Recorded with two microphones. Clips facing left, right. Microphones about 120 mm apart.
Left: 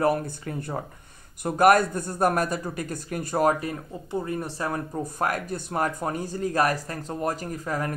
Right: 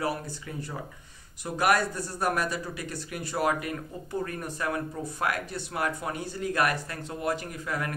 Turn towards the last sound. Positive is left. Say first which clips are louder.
# left 4 dB
turn(degrees=35)  # may be behind; listen again after turning